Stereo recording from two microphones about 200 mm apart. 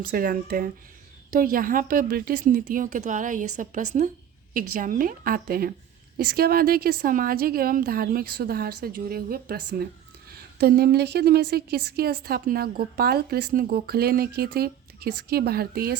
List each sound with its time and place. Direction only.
0.1 s a woman's voice: 45° right (ahead or behind)